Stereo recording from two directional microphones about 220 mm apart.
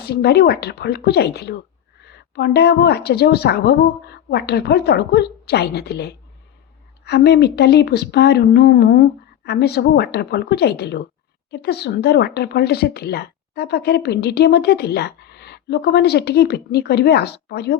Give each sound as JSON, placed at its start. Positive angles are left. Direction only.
{"t": 0.0, "sound": "speech", "side_deg": 45}